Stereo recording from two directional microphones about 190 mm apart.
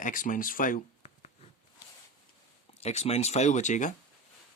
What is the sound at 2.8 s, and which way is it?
Speech, 35° left (ahead or behind).